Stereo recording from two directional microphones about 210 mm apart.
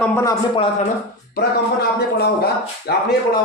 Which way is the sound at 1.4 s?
50° left (ahead or behind).